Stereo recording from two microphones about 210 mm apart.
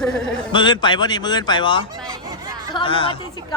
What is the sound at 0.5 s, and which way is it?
A man's voice, 20° left (ahead or behind).